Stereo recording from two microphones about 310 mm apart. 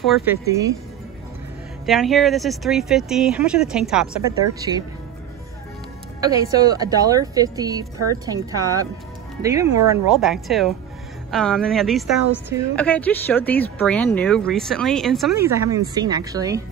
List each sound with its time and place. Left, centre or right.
0.0 s speech: centre
0.5 s a woman's voice: centre
1.9 s speech: centre
6.2 s a woman's voice: centre